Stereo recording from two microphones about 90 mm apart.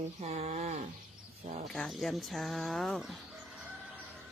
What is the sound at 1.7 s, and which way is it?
Speech, 5° left (ahead or behind).